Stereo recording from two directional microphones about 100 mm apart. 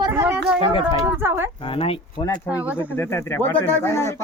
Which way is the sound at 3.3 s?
20° left (ahead or behind).